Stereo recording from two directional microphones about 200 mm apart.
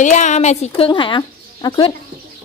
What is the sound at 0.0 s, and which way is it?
A woman's voice, 40° left (ahead or behind).